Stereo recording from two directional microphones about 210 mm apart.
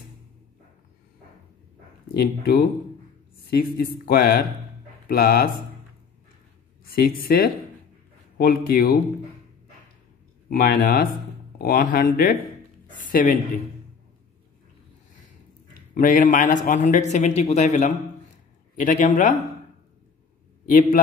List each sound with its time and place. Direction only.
2.1 s speech: 45° left (ahead or behind)
6.9 s speech: 45° left (ahead or behind)
10.5 s a woman's voice: 45° left (ahead or behind)
15.9 s a man's voice: 40° left (ahead or behind)